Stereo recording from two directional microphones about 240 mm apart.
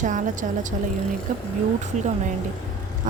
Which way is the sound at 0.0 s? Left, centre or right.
Right.